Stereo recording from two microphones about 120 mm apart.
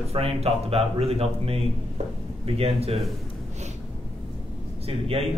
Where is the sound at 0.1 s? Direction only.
55° right (ahead or behind).